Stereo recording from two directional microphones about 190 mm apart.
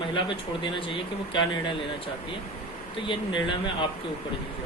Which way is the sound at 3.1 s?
25° left (ahead or behind).